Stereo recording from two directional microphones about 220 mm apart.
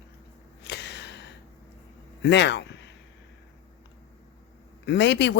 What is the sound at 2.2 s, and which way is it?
Speech, 50° left (ahead or behind).